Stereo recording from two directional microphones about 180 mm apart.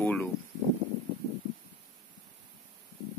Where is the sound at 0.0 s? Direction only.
10° left (ahead or behind).